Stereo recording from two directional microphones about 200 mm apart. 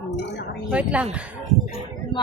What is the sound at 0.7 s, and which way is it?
Speech, 5° right (ahead or behind).